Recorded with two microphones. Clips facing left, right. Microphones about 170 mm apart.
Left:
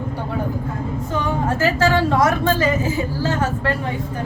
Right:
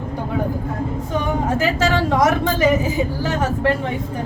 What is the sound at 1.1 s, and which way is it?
A woman's voice, 15° right (ahead or behind).